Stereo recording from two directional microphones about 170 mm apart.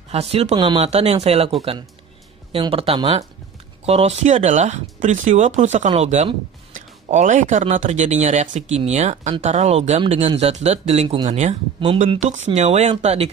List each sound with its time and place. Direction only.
0.1 s speech: 35° right (ahead or behind)